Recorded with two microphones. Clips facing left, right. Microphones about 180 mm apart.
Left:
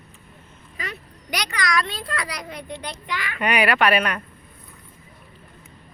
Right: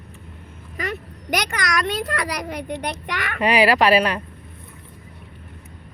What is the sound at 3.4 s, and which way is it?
Speech, 30° right (ahead or behind).